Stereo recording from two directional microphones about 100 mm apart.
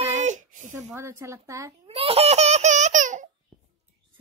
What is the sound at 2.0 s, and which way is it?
Baby laughter, 80° right.